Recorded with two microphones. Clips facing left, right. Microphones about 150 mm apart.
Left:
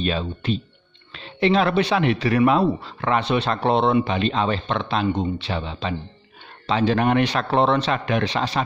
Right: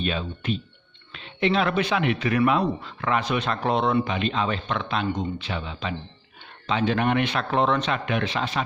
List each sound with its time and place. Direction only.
0.0 s speech: 35° left (ahead or behind)